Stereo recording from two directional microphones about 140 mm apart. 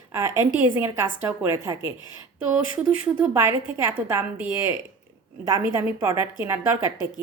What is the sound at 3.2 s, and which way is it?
A woman's voice, 20° right (ahead or behind).